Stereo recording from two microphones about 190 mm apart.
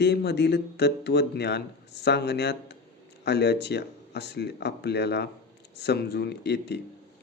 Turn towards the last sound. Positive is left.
turn(degrees=60)  # may be behind; listen again after turning